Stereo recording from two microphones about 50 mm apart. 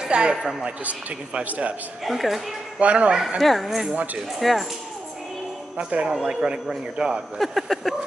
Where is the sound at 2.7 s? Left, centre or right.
Right.